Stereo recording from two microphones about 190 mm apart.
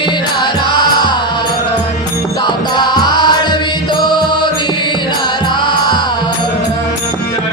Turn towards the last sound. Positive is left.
turn(degrees=25)  # may be behind; listen again after turning